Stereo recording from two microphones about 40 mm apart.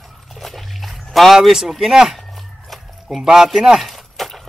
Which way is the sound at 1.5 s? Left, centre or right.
Centre.